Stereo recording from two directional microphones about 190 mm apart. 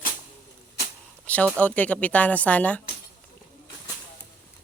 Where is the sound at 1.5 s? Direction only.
10° left (ahead or behind).